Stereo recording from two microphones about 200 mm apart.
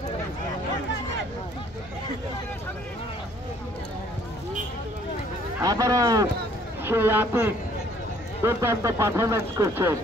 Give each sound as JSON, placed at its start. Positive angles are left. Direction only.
{"t": 5.6, "sound": "speech", "side_deg": -15}